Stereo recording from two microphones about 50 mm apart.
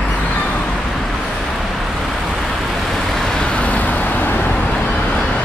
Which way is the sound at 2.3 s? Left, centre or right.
Centre.